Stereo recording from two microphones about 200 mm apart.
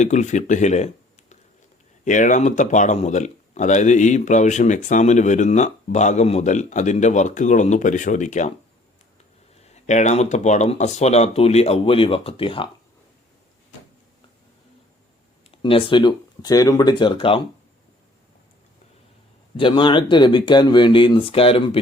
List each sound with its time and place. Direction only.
0.0 s speech: 35° left (ahead or behind)
2.0 s speech: 40° left (ahead or behind)
9.6 s speech: 35° left (ahead or behind)
15.6 s speech: 25° left (ahead or behind)
19.5 s speech: 25° left (ahead or behind)